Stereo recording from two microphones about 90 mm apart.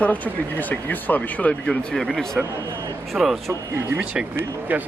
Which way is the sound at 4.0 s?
10° right (ahead or behind).